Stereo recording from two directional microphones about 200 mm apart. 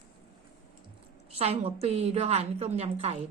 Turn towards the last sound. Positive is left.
turn(degrees=-30)  # may be behind; listen again after turning